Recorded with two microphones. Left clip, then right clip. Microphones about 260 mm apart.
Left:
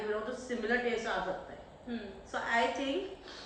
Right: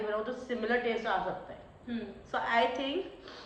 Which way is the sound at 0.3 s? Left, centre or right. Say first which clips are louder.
Right 1 dB; centre.